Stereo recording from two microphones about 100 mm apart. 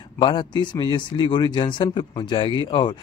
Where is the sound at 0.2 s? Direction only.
50° left (ahead or behind).